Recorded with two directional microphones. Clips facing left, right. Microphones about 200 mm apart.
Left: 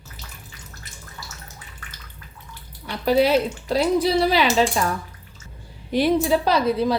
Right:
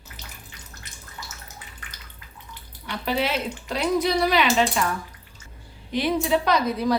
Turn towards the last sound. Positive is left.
turn(degrees=30)  # may be behind; listen again after turning